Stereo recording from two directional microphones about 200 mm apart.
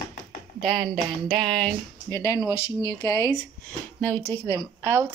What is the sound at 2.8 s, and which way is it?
Speech, 15° left (ahead or behind).